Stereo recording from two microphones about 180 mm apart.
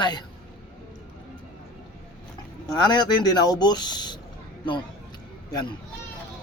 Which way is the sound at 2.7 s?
25° left (ahead or behind).